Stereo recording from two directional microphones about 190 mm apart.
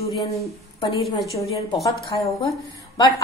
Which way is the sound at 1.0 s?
Centre (ahead or behind).